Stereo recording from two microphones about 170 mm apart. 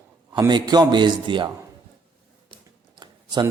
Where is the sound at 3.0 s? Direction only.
25° right (ahead or behind).